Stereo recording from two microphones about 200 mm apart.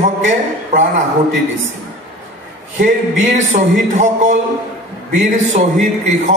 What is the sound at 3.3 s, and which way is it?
A man's voice, 35° right (ahead or behind).